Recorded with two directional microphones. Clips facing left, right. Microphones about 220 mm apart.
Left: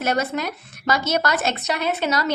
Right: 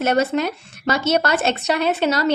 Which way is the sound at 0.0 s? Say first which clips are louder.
Right 5 dB; 30° right (ahead or behind).